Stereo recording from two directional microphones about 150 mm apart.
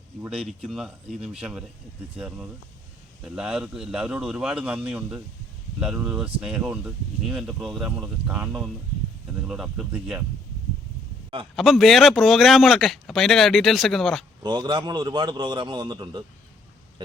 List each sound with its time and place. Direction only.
0.3 s speech: 5° right (ahead or behind)
11.5 s speech: centre (ahead or behind)
14.4 s a man's voice: 30° right (ahead or behind)